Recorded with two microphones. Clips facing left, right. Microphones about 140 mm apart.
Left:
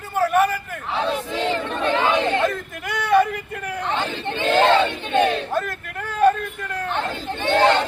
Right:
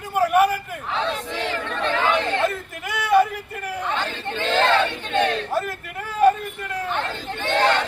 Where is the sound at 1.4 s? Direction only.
20° left (ahead or behind).